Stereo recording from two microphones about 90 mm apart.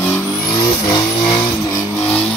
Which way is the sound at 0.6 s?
50° left (ahead or behind).